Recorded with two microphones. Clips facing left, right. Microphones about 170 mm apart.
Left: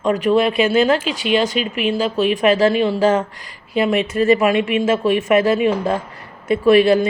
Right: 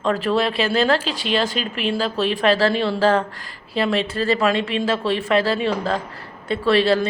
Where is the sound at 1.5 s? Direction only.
5° left (ahead or behind).